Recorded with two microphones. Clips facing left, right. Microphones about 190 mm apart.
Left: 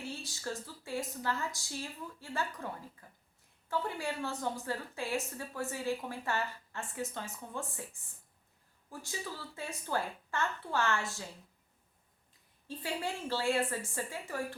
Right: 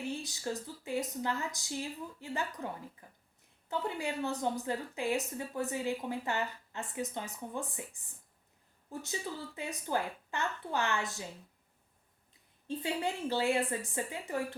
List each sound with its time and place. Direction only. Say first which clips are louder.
0.1 s a woman's voice: right 3 dB; 15° right (ahead or behind)
3.0 s a sound: right 1 dB; 20° right (ahead or behind)
3.7 s a woman's voice: even; 20° right (ahead or behind)
8.9 s a woman's voice: right 3 dB; 20° right (ahead or behind)
12.6 s a woman's voice: right 3 dB; 20° right (ahead or behind)